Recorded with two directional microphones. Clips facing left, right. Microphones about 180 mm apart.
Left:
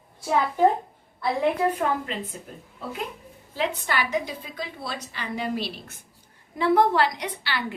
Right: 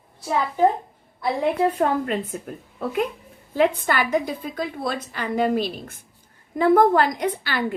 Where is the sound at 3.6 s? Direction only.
50° right (ahead or behind).